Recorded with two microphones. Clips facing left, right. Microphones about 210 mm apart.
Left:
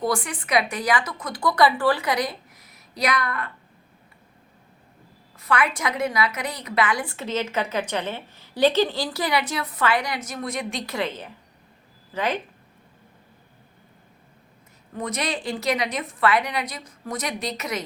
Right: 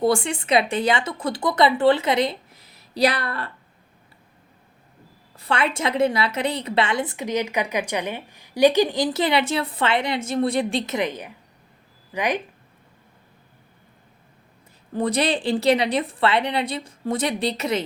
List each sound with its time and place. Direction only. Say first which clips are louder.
0.0 s a woman's voice: right 5 dB; 25° right (ahead or behind)
5.4 s a woman's voice: right 1 dB; 25° right (ahead or behind)
14.9 s a woman's voice: right 6 dB; 30° right (ahead or behind)